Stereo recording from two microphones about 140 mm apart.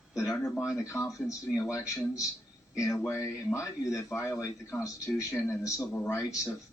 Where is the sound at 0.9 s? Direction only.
25° left (ahead or behind).